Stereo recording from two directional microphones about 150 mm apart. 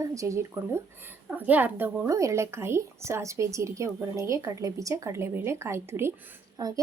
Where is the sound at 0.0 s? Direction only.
20° right (ahead or behind).